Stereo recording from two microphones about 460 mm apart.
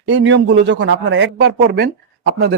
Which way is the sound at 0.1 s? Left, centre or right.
Right.